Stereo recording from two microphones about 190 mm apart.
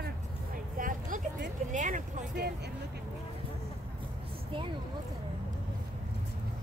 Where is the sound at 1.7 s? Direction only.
40° right (ahead or behind).